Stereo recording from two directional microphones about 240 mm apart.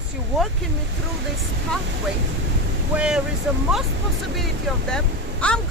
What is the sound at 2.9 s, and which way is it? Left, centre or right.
Speech, centre.